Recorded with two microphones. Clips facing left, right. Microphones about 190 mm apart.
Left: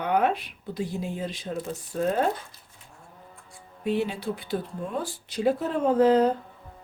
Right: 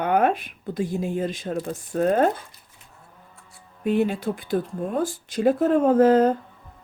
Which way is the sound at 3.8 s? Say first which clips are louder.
Right 5 dB; 50° right (ahead or behind).